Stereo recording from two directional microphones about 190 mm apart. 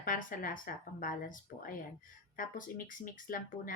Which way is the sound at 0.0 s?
45° left (ahead or behind).